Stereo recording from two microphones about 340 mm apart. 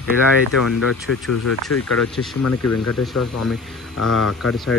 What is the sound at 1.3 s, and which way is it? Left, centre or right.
Speech, left.